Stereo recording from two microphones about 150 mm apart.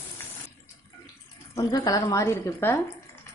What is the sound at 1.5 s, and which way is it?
A woman's voice, 25° left (ahead or behind).